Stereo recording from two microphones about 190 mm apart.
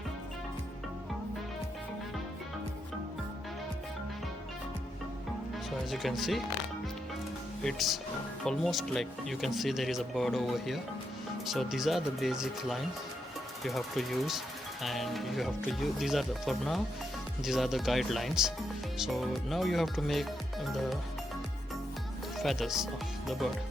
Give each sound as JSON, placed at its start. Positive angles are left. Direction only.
{"t": 5.9, "sound": "speech", "side_deg": 0}
{"t": 7.6, "sound": "speech", "side_deg": 0}
{"t": 22.4, "sound": "speech", "side_deg": 0}